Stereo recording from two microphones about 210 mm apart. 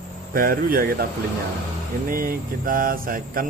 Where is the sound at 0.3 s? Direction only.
45° right (ahead or behind).